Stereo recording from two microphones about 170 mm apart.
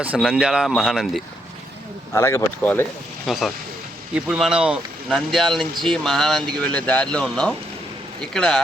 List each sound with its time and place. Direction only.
0.0 s speech: 10° right (ahead or behind)
2.1 s speech: 15° left (ahead or behind)
3.2 s speech: centre (ahead or behind)